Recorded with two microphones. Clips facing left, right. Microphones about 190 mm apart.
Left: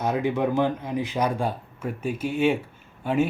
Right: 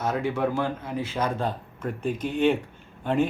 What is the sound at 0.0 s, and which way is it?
Speech, 15° left (ahead or behind).